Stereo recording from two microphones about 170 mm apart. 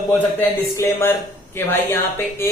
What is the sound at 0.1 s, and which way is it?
A man's voice, 15° left (ahead or behind).